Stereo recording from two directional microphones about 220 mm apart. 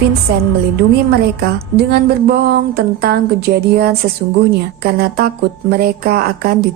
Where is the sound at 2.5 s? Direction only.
45° right (ahead or behind).